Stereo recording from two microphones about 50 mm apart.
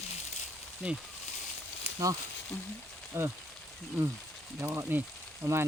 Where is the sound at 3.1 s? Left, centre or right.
Right.